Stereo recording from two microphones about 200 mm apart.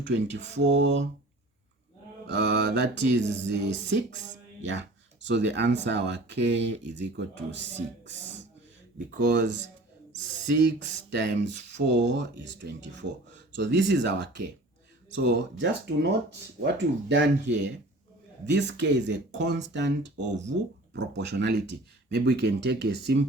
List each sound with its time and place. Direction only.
0.0 s speech: 60° right (ahead or behind)
2.2 s speech: 60° right (ahead or behind)